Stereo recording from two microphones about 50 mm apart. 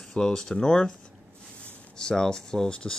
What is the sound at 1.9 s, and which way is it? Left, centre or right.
Speech, centre.